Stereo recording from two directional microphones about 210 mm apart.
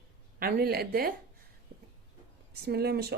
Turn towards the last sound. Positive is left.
turn(degrees=-50)  # may be behind; listen again after turning